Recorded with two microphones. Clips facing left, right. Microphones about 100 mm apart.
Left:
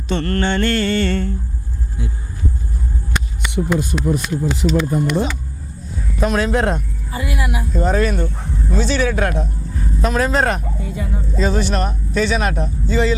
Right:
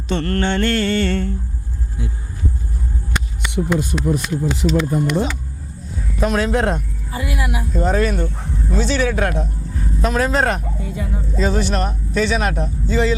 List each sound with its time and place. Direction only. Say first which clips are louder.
0.1 s speech: even; 5° left (ahead or behind)
3.1 s a sound: left 1 dB; 5° left (ahead or behind)
3.7 s a man's voice: even; 5° left (ahead or behind)